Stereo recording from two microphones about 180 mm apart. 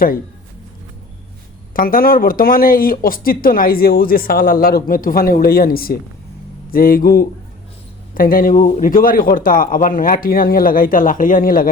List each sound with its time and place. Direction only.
1.7 s speech: 50° left (ahead or behind)